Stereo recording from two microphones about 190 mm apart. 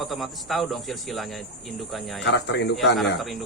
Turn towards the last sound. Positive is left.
turn(degrees=0)  # may be behind; listen again after turning